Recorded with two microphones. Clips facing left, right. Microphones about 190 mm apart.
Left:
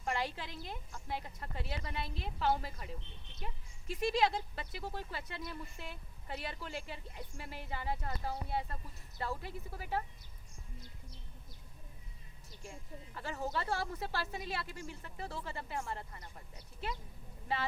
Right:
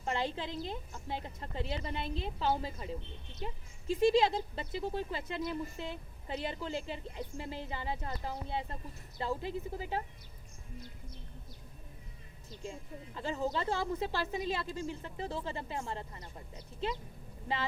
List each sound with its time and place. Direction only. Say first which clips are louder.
0.0 s a woman's voice: right 3 dB; 25° right (ahead or behind)
3.9 s a woman's voice: right 5 dB; 30° right (ahead or behind)
13.1 s a woman's voice: right 4 dB; 20° right (ahead or behind)